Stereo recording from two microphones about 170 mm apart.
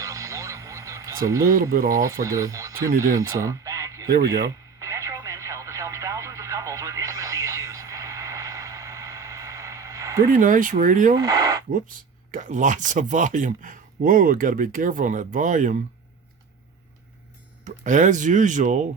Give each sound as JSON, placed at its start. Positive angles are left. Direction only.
{"t": 0.0, "sound": "radio", "side_deg": -20}
{"t": 2.0, "sound": "speech", "side_deg": -20}
{"t": 4.8, "sound": "radio", "side_deg": -20}
{"t": 10.2, "sound": "speech", "side_deg": -50}
{"t": 11.2, "sound": "a sound", "side_deg": -20}
{"t": 11.7, "sound": "speech", "side_deg": -50}
{"t": 17.7, "sound": "speech", "side_deg": -50}